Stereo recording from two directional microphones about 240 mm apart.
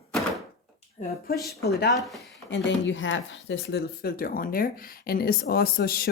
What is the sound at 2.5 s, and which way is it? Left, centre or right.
Speech, left.